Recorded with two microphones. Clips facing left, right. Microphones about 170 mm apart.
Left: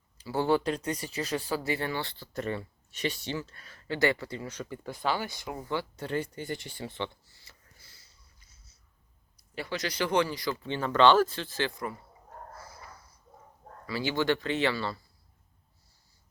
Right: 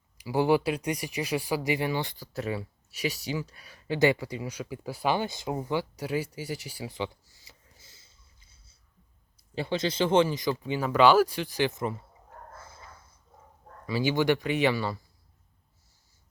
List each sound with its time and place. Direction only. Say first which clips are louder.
0.2 s speech: right 3 dB; 15° right (ahead or behind)
5.1 s speech: right 5 dB; 20° right (ahead or behind)
6.3 s a sound: right 1 dB; 5° right (ahead or behind); by 8.7 s 25° right (ahead or behind)
9.6 s speech: right 5 dB; 25° right (ahead or behind)
13.8 s speech: right 3 dB; 15° right (ahead or behind)